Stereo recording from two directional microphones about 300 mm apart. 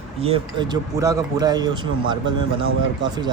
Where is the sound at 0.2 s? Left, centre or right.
Centre.